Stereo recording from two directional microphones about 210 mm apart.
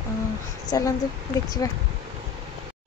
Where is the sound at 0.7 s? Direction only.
20° left (ahead or behind).